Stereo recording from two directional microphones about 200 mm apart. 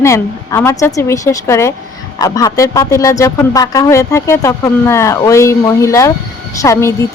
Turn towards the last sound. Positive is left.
turn(degrees=15)  # may be behind; listen again after turning